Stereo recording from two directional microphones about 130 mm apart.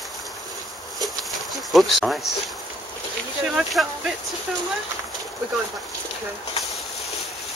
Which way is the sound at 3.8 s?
5° right (ahead or behind).